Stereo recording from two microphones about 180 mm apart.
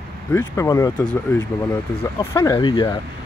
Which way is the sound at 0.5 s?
20° left (ahead or behind).